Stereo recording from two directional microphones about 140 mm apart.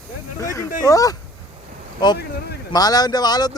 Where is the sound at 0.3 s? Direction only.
20° left (ahead or behind).